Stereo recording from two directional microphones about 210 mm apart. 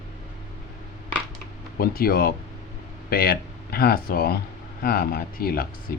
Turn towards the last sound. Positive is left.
turn(degrees=45)  # may be behind; listen again after turning